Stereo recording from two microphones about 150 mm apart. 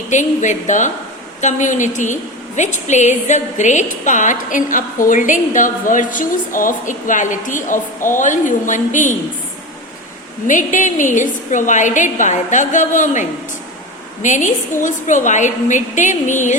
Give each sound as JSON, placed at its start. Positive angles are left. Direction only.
{"t": 0.1, "sound": "a woman's voice", "side_deg": 55}
{"t": 10.4, "sound": "a woman's voice", "side_deg": 60}